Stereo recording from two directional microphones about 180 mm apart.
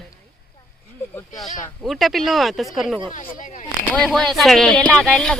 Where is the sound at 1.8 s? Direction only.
Centre (ahead or behind).